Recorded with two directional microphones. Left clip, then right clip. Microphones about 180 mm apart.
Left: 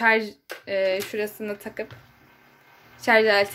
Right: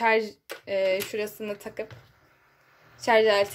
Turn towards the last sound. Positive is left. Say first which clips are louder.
# left 2 dB
turn(degrees=-10)  # may be behind; listen again after turning